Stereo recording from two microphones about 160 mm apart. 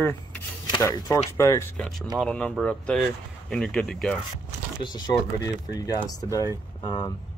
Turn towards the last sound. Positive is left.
turn(degrees=25)  # may be behind; listen again after turning